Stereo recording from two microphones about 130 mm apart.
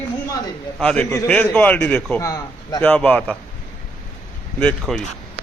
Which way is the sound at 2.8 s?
10° left (ahead or behind).